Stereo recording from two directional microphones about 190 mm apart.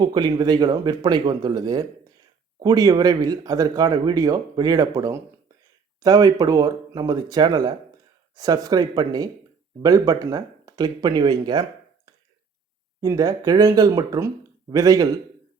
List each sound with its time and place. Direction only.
0.0 s speech: 20° right (ahead or behind)
13.0 s speech: 20° right (ahead or behind)